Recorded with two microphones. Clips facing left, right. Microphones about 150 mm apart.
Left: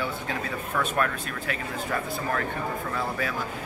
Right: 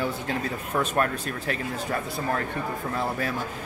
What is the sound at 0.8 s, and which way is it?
Speech, 35° right (ahead or behind).